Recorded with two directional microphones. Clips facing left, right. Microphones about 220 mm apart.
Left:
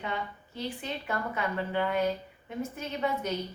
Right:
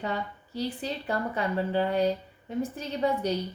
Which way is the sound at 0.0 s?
35° right (ahead or behind).